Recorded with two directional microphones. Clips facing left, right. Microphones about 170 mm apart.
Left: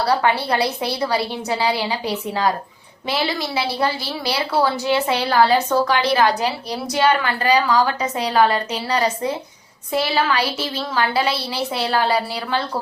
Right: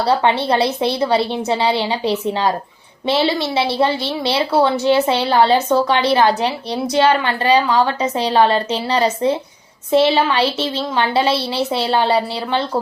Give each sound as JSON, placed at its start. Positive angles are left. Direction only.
{"t": 0.0, "sound": "a woman's voice", "side_deg": -25}